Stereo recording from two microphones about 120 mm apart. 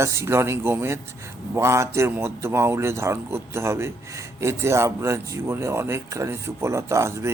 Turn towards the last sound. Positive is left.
turn(degrees=-25)  # may be behind; listen again after turning